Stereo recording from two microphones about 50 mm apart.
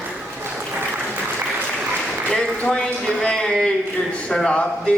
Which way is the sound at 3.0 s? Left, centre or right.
Centre.